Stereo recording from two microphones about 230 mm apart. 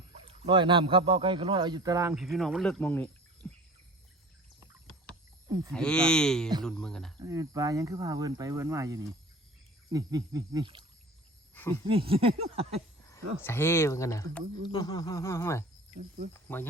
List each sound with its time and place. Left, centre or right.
0.3 s speech: right
2.1 s speech: centre
3.4 s bird: centre
5.7 s speech: centre
7.2 s speech: centre
11.5 s speech: centre
11.9 s speech: right
13.1 s speech: centre
16.0 s speech: right